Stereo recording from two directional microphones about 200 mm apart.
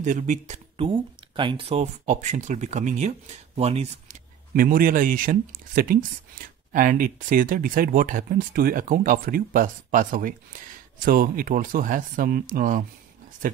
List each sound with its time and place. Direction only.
0.0 s speech: 40° right (ahead or behind)
4.6 s speech: 45° right (ahead or behind)